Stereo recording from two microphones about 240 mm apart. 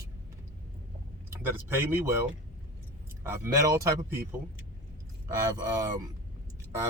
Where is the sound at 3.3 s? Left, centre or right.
Centre.